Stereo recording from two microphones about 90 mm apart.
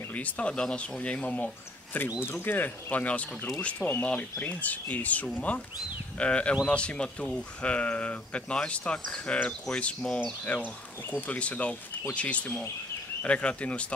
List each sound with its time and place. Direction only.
0.1 s speech: 15° left (ahead or behind)